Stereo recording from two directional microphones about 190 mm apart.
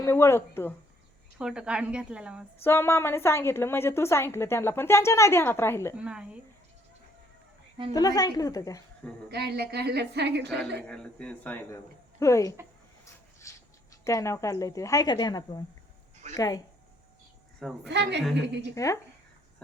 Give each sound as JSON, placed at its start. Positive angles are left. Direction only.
{"t": 0.0, "sound": "a woman's voice", "side_deg": 15}
{"t": 1.4, "sound": "a woman's voice", "side_deg": -5}
{"t": 2.6, "sound": "a woman's voice", "side_deg": 10}
{"t": 6.0, "sound": "a woman's voice", "side_deg": -5}
{"t": 7.9, "sound": "a woman's voice", "side_deg": 20}
{"t": 9.3, "sound": "a woman's voice", "side_deg": -55}
{"t": 10.8, "sound": "a woman's voice", "side_deg": 5}
{"t": 13.5, "sound": "a sound", "side_deg": 15}
{"t": 14.0, "sound": "a woman's voice", "side_deg": 15}
{"t": 17.8, "sound": "a woman's voice", "side_deg": -65}
{"t": 18.7, "sound": "a woman's voice", "side_deg": 15}